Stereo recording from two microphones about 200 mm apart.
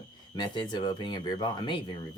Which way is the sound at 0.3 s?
20° left (ahead or behind).